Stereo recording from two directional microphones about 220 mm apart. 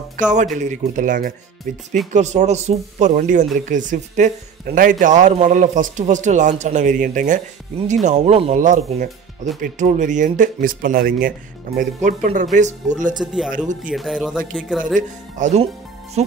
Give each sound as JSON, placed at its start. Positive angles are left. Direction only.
{"t": 0.2, "sound": "speech", "side_deg": -35}
{"t": 13.2, "sound": "speech", "side_deg": 0}
{"t": 15.0, "sound": "speech", "side_deg": -35}